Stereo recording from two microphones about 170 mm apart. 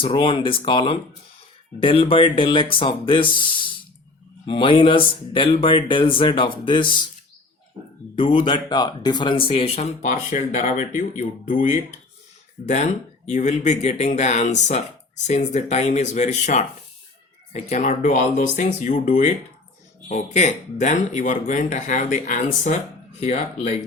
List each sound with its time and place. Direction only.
0.0 s speech: 30° left (ahead or behind)
8.1 s speech: 30° left (ahead or behind)